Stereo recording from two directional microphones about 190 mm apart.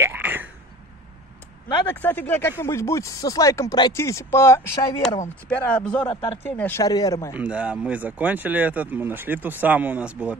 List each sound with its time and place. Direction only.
0.0 s a sound: 10° right (ahead or behind)
2.0 s speech: 10° left (ahead or behind)
7.3 s speech: 5° right (ahead or behind)